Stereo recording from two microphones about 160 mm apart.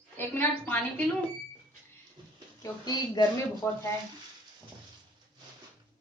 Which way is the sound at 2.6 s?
25° left (ahead or behind).